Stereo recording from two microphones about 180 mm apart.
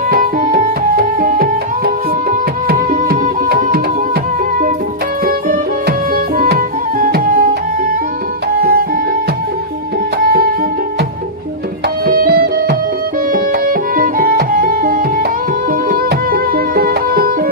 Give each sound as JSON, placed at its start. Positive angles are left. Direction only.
{"t": 0.1, "sound": "tabla", "side_deg": -55}
{"t": 2.3, "sound": "music", "side_deg": -55}
{"t": 6.3, "sound": "music", "side_deg": -50}
{"t": 10.2, "sound": "music", "side_deg": -55}
{"t": 12.0, "sound": "music", "side_deg": -60}